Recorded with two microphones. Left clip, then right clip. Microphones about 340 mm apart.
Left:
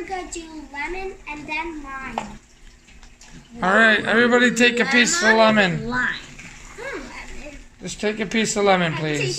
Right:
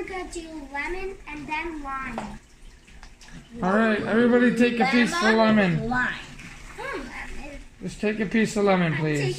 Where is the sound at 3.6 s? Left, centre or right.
Left.